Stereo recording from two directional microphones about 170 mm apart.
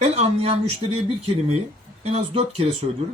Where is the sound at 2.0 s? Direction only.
40° right (ahead or behind).